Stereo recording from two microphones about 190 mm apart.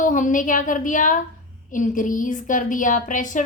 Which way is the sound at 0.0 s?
45° left (ahead or behind).